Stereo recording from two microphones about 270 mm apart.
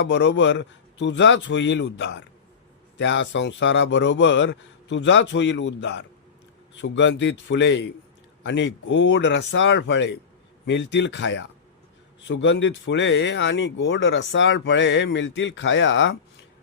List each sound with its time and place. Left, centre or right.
0.0 s a man's voice: left